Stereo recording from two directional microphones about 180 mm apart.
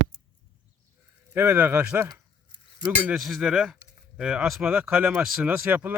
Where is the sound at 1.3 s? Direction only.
15° right (ahead or behind).